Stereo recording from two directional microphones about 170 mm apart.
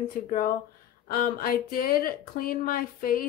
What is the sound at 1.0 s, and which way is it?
Speech, 60° left (ahead or behind).